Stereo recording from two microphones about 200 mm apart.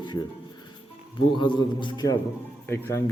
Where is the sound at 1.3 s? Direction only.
25° left (ahead or behind).